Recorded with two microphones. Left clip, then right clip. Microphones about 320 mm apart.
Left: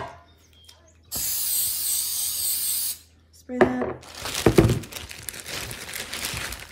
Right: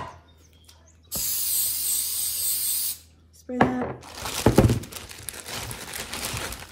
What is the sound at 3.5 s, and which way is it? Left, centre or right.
Speech, right.